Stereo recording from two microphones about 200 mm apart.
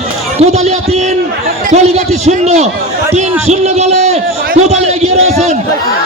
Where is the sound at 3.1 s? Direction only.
35° right (ahead or behind).